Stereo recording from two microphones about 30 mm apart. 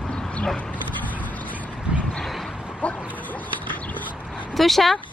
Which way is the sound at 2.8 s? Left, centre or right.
Left.